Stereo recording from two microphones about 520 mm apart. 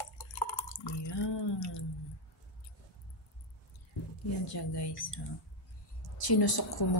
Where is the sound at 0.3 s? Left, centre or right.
Left.